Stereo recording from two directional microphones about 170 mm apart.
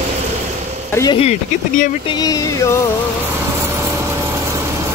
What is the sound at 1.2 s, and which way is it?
Speech, 40° left (ahead or behind).